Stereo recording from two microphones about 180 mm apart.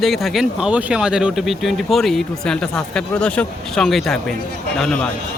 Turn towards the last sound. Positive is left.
turn(degrees=5)  # may be behind; listen again after turning